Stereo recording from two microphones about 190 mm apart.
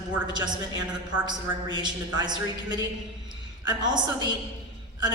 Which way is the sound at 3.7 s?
25° right (ahead or behind).